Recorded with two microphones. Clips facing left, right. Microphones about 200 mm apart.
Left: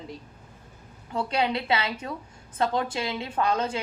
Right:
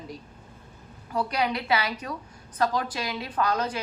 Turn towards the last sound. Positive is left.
turn(degrees=25)  # may be behind; listen again after turning